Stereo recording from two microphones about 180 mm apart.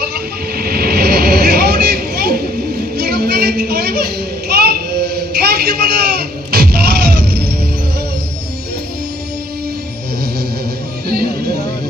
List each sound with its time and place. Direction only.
0.0 s vehicle: 60° right (ahead or behind)